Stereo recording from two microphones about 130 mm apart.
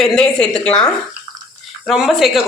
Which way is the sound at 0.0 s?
5° left (ahead or behind).